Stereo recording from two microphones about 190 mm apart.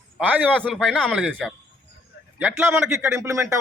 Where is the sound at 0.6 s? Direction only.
Centre (ahead or behind).